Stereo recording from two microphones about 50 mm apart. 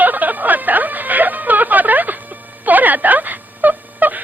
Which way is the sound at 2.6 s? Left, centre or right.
Right.